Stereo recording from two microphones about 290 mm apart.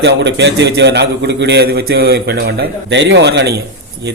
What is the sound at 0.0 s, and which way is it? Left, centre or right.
A man's voice, right.